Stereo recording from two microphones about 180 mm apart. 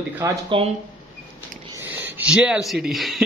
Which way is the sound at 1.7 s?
10° right (ahead or behind).